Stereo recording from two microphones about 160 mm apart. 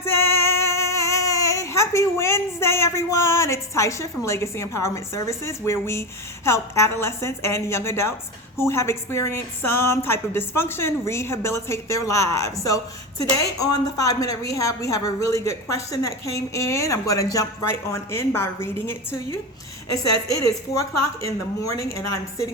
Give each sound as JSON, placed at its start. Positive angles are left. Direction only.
{"t": 0.0, "sound": "child singing", "side_deg": 15}
{"t": 4.3, "sound": "a woman's voice", "side_deg": 15}